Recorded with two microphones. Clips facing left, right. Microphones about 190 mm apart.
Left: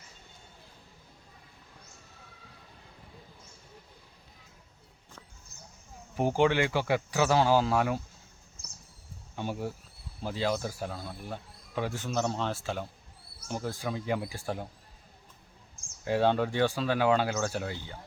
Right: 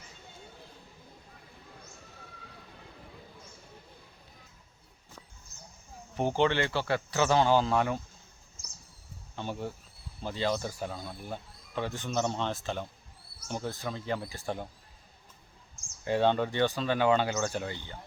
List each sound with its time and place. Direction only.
6.1 s speech: 5° left (ahead or behind)
9.3 s speech: 10° left (ahead or behind)
16.0 s speech: 5° left (ahead or behind)